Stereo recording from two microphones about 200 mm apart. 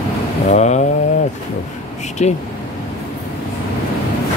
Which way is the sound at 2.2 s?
35° left (ahead or behind).